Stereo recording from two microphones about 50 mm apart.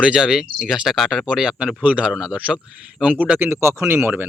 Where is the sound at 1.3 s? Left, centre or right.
Centre.